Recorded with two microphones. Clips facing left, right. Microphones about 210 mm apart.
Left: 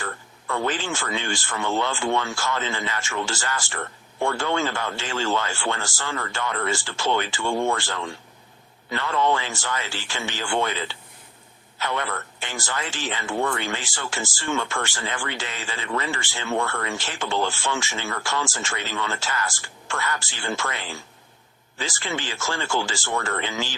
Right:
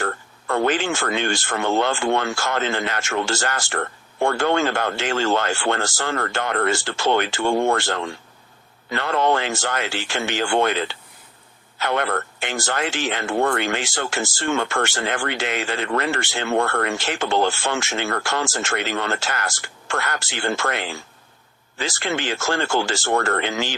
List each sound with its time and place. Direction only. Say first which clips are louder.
0.0 s speech: right 7 dB; 60° right (ahead or behind)